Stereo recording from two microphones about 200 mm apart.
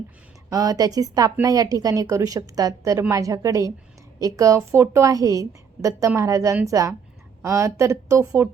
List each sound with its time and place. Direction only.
0.5 s a woman's voice: 15° right (ahead or behind)